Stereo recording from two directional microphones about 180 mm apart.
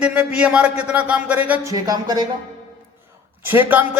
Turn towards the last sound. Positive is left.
turn(degrees=-10)  # may be behind; listen again after turning